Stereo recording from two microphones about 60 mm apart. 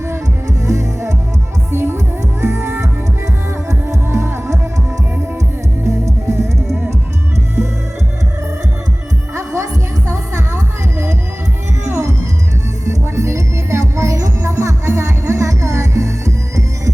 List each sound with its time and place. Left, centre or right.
0.4 s music: right
3.9 s music: right
5.8 s music: right
9.3 s music: right
12.8 s music: right